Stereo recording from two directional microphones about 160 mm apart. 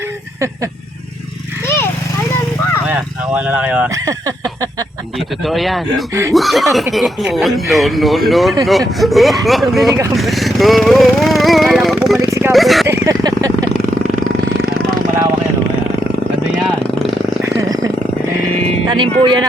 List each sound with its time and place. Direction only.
2.8 s dog: 10° right (ahead or behind)
5.5 s speech: centre (ahead or behind)
12.9 s a sound: 20° right (ahead or behind)
16.5 s vehicle: 5° right (ahead or behind)
17.4 s a sound: 20° right (ahead or behind)
18.9 s music: 30° right (ahead or behind)